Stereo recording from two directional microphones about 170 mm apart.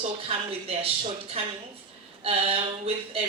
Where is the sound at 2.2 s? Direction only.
35° right (ahead or behind).